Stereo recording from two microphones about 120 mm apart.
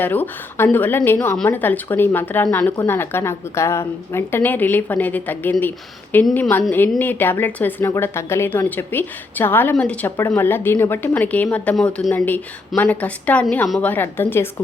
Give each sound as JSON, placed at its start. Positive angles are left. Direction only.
{"t": 0.0, "sound": "speech", "side_deg": 15}
{"t": 10.2, "sound": "speech", "side_deg": 20}